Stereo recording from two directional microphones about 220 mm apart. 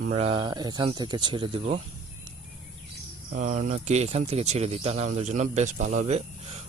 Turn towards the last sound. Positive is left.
turn(degrees=-30)  # may be behind; listen again after turning